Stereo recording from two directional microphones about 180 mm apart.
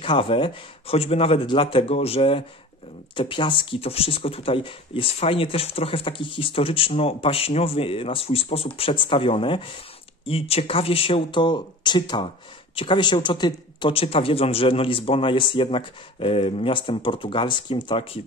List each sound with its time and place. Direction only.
0.0 s speech: 30° left (ahead or behind)